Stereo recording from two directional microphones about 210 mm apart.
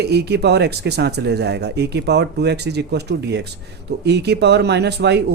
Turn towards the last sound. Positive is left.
turn(degrees=-50)  # may be behind; listen again after turning